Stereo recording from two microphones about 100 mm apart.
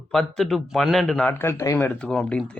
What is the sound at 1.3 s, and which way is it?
Speech, 25° left (ahead or behind).